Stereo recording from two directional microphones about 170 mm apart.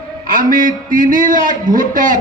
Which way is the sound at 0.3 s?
50° right (ahead or behind).